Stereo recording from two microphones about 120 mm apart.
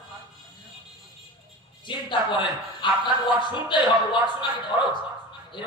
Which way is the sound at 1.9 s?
40° left (ahead or behind).